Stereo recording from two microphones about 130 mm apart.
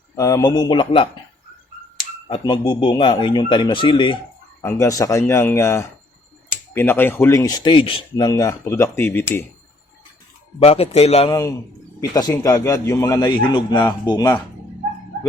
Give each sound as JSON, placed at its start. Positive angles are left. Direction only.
{"t": 0.2, "sound": "speech", "side_deg": 25}
{"t": 2.3, "sound": "speech", "side_deg": 40}
{"t": 4.6, "sound": "a man's voice", "side_deg": 25}
{"t": 7.7, "sound": "a man's voice", "side_deg": 45}
{"t": 10.6, "sound": "speech", "side_deg": 50}
{"t": 11.3, "sound": "a man's voice", "side_deg": 25}